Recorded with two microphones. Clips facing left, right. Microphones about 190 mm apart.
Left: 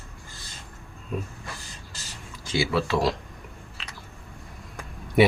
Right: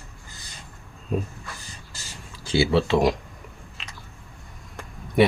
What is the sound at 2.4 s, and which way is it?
Speech, 30° right (ahead or behind).